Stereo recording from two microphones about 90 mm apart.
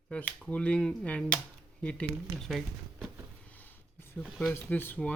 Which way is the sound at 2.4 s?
Centre (ahead or behind).